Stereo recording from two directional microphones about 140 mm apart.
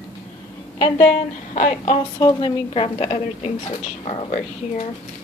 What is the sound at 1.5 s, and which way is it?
Speech, 55° left (ahead or behind).